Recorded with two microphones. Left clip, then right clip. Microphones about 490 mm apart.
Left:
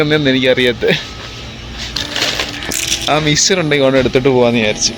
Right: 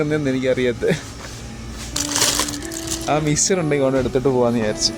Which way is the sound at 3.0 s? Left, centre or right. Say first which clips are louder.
Left 6 dB; right.